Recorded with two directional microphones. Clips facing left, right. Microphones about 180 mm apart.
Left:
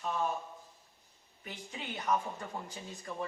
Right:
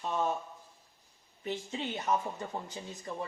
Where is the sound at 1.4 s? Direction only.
25° right (ahead or behind).